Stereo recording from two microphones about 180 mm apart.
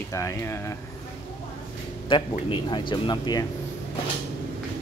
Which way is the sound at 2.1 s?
25° left (ahead or behind).